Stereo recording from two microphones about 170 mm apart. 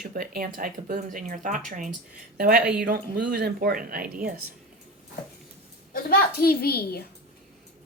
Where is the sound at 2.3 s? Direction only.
60° right (ahead or behind).